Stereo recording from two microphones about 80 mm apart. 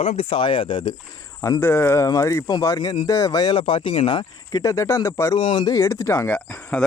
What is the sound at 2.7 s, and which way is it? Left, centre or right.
Speech, left.